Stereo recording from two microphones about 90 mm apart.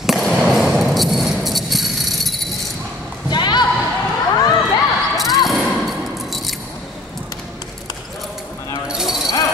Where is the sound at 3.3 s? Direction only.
55° left (ahead or behind).